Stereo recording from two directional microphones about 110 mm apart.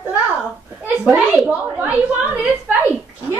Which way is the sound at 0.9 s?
10° right (ahead or behind).